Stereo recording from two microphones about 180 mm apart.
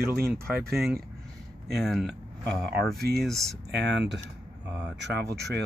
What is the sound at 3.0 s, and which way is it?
Speech, 60° right (ahead or behind).